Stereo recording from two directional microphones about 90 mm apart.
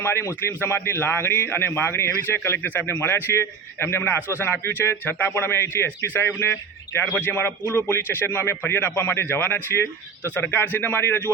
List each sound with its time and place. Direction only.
0.0 s a man's voice: 30° left (ahead or behind)